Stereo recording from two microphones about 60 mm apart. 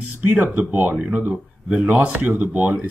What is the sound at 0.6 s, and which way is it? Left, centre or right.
Speech, right.